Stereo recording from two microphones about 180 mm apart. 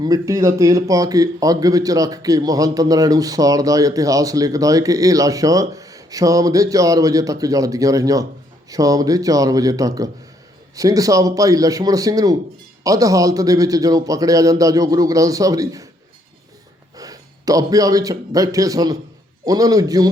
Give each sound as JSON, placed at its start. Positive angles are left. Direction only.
{"t": 0.0, "sound": "a man's voice", "side_deg": -20}
{"t": 17.0, "sound": "a man's voice", "side_deg": -20}